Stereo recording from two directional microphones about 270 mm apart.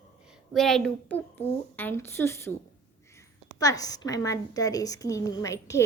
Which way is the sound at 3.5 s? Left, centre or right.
Centre.